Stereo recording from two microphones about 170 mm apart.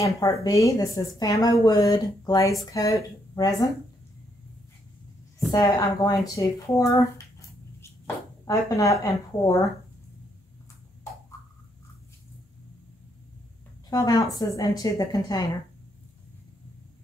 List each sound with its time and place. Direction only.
0.0 s speech: 20° left (ahead or behind)
5.5 s speech: 20° left (ahead or behind)
8.5 s speech: 20° left (ahead or behind)
13.8 s speech: 20° left (ahead or behind)